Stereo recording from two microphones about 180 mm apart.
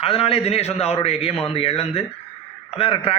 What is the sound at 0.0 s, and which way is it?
A man's voice, 30° left (ahead or behind).